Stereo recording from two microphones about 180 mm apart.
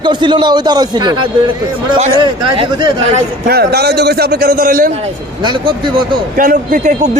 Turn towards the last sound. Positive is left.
turn(degrees=-50)  # may be behind; listen again after turning